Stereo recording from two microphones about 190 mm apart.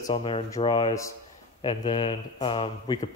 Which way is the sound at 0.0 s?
30° left (ahead or behind).